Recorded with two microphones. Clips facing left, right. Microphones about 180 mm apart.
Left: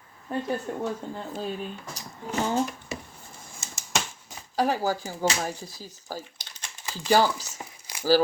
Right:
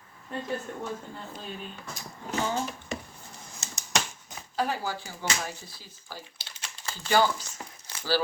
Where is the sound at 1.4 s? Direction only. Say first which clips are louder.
Left 7 dB; 40° left (ahead or behind).